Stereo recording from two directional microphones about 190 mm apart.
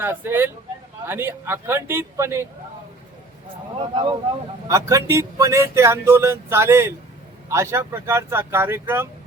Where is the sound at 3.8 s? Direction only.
25° right (ahead or behind).